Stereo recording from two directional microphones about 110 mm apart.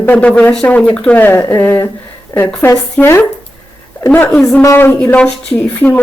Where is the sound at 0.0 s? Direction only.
15° left (ahead or behind).